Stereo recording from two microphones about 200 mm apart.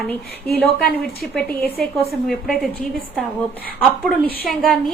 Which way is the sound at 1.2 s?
Centre (ahead or behind).